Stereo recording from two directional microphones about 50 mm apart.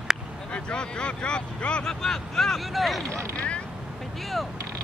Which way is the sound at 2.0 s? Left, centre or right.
Centre.